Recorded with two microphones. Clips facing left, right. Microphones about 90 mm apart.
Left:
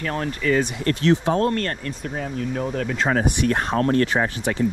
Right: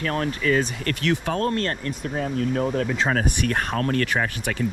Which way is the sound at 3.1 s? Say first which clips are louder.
Left 3 dB; 30° left (ahead or behind).